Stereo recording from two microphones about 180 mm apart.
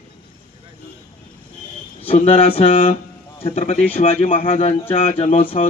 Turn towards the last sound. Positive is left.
turn(degrees=30)  # may be behind; listen again after turning